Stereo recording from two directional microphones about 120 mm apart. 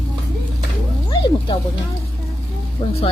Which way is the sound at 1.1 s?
40° left (ahead or behind).